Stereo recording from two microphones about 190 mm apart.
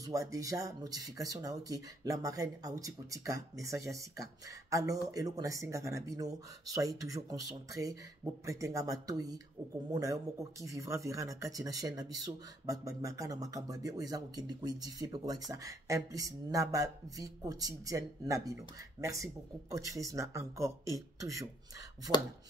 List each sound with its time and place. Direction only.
0.0 s speech: 15° right (ahead or behind)